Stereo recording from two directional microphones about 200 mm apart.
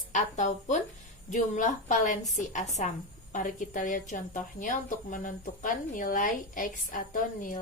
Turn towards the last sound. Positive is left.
turn(degrees=40)  # may be behind; listen again after turning